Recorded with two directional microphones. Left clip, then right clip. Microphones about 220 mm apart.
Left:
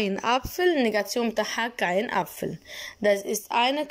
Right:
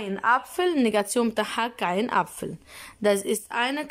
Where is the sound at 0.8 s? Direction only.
15° right (ahead or behind).